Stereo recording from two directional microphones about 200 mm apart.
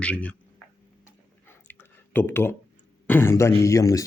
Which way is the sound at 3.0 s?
10° left (ahead or behind).